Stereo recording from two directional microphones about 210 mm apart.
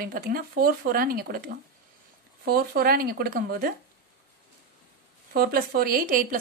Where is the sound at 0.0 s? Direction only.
45° right (ahead or behind).